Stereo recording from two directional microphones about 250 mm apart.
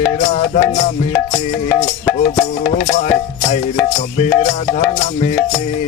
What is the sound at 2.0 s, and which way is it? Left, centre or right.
Music, centre.